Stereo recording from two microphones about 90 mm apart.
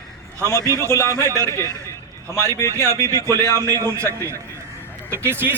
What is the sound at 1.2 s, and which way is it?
Speech, 35° right (ahead or behind).